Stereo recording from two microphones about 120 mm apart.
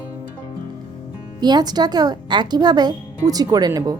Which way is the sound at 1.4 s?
35° right (ahead or behind).